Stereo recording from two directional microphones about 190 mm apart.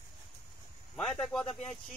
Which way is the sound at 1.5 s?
35° left (ahead or behind).